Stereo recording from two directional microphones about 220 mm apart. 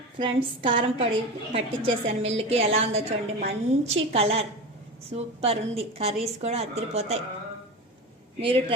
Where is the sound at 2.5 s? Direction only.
25° right (ahead or behind).